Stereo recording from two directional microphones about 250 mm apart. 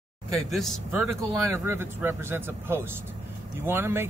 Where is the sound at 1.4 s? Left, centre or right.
Centre.